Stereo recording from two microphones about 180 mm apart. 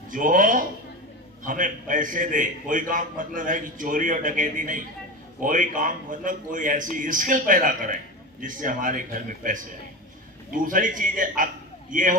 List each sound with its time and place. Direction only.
0.1 s a man's voice: 45° right (ahead or behind)